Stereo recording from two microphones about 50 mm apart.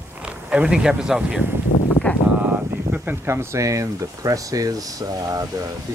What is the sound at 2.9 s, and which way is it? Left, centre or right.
Speech, right.